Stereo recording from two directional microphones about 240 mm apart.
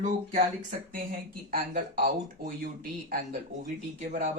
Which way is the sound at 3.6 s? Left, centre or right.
Right.